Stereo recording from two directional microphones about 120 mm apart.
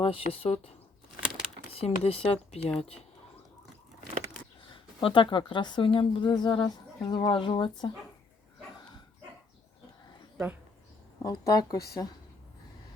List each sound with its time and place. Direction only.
0.0 s speech: 50° left (ahead or behind)
1.7 s speech: 55° left (ahead or behind)
4.7 s a woman's voice: 45° left (ahead or behind)
10.3 s speech: 15° right (ahead or behind)
11.2 s a woman's voice: 35° left (ahead or behind)